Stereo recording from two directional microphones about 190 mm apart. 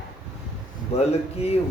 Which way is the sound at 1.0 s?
35° left (ahead or behind).